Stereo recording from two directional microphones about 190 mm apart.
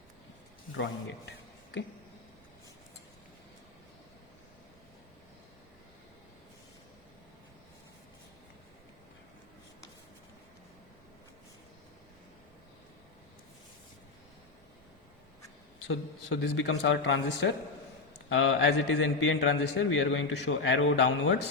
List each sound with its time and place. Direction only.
0.8 s speech: 70° left (ahead or behind)
15.9 s a man's voice: 80° left